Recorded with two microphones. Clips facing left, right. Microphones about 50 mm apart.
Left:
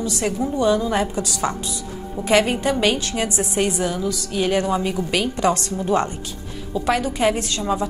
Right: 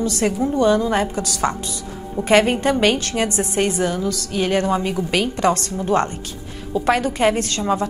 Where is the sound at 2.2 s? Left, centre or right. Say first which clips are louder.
Right 2 dB; right.